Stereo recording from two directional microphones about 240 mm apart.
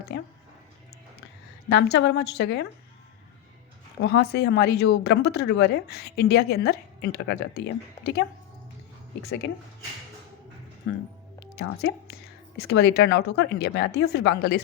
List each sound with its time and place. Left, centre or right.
0.1 s a woman's voice: left
1.7 s a woman's voice: left
4.0 s a woman's voice: left
9.2 s speech: left
11.8 s a woman's voice: left